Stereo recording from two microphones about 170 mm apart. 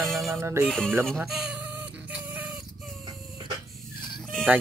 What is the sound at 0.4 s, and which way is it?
Speech, 15° right (ahead or behind).